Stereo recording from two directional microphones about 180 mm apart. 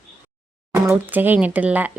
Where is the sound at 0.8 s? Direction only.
10° right (ahead or behind).